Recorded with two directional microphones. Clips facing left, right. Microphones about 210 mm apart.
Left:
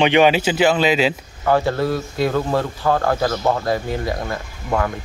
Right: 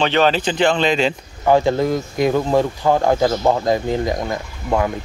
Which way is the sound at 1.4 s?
15° right (ahead or behind).